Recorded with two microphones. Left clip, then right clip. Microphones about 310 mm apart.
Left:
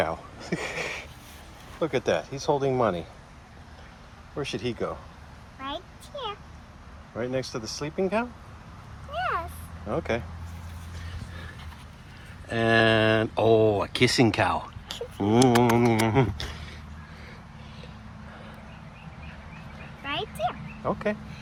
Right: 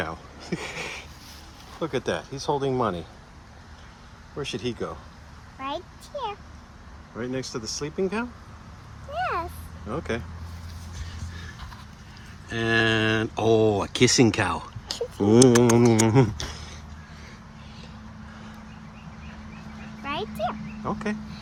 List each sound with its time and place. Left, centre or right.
0.0 s a sound: centre
1.8 s speech: centre
4.4 s speech: centre
5.5 s a sound: right
7.2 s speech: centre
9.1 s vehicle: right
9.9 s speech: centre
12.5 s speech: centre
20.1 s a sound: right
20.8 s speech: centre